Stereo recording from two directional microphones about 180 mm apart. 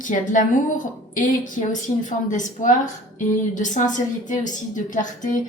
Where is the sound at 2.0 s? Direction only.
45° left (ahead or behind).